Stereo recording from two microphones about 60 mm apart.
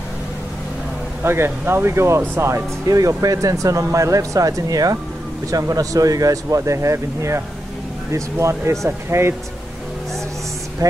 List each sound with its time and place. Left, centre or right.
1.2 s speech: right
2.9 s speech: right
5.5 s speech: right
10.8 s speech: right